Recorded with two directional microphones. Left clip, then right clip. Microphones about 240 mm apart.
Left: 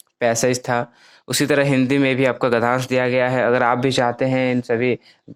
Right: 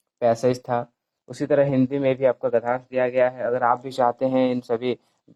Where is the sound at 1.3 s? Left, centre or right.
Left.